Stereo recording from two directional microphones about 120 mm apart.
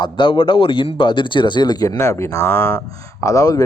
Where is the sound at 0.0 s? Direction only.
45° left (ahead or behind).